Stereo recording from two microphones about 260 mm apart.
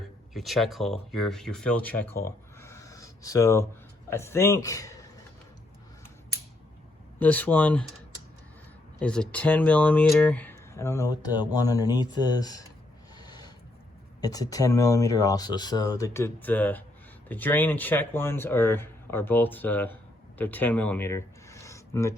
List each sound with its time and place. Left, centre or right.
0.3 s speech: centre
7.2 s speech: centre
9.0 s speech: centre
13.1 s a sound: centre
14.2 s speech: centre